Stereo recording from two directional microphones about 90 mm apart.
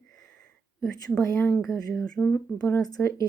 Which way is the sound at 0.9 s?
40° left (ahead or behind).